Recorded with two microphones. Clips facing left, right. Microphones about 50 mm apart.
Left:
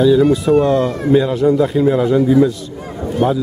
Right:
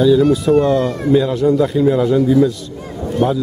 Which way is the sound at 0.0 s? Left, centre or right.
Centre.